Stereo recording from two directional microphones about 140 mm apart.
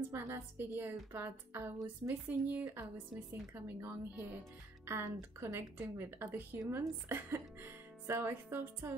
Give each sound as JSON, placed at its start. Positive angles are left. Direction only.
{"t": 0.1, "sound": "speech", "side_deg": -20}